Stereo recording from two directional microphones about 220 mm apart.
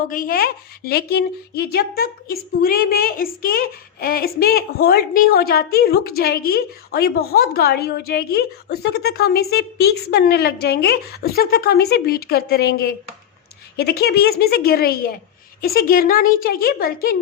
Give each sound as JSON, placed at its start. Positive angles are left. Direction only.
{"t": 0.1, "sound": "a woman's voice", "side_deg": 40}